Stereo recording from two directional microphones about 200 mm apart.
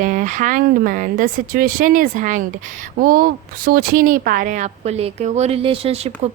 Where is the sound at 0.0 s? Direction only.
40° right (ahead or behind).